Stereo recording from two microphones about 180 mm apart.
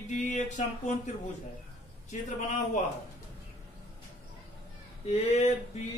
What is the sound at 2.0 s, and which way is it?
Speech, 45° left (ahead or behind).